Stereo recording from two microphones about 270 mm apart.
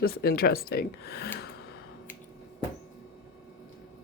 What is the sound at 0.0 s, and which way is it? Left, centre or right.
Speech, left.